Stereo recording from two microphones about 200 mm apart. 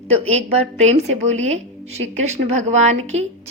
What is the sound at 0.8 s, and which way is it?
A woman's voice, 35° right (ahead or behind).